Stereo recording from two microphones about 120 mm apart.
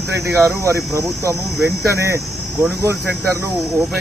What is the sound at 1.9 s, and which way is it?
Speech, 25° right (ahead or behind).